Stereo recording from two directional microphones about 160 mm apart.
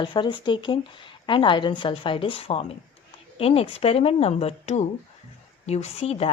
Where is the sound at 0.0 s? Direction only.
30° left (ahead or behind).